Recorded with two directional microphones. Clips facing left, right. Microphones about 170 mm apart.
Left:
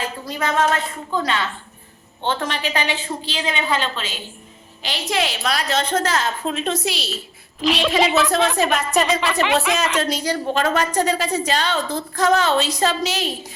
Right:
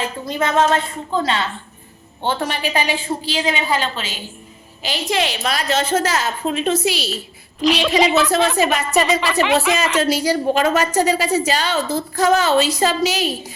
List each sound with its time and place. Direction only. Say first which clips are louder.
0.3 s a woman's voice: right 3 dB; 25° right (ahead or behind)
2.2 s a woman's voice: right 2 dB; 10° right (ahead or behind)